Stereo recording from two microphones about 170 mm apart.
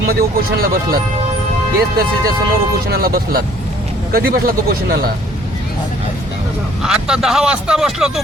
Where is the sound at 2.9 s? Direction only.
65° right (ahead or behind).